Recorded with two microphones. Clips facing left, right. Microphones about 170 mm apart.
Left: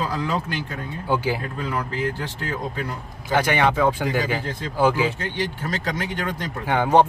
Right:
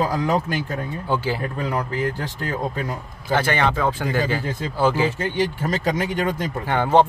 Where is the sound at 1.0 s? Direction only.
10° left (ahead or behind).